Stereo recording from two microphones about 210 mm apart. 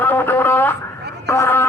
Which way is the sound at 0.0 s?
10° left (ahead or behind).